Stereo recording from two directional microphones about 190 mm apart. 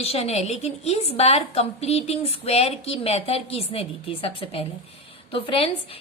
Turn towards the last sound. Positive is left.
turn(degrees=30)  # may be behind; listen again after turning